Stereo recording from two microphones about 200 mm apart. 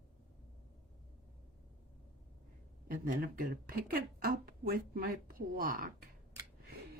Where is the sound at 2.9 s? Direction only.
45° right (ahead or behind).